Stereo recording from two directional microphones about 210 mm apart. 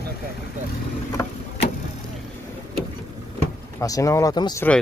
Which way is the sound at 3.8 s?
15° left (ahead or behind).